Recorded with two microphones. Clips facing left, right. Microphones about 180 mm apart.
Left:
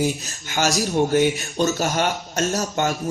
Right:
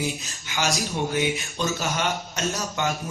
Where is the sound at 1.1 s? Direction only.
45° left (ahead or behind).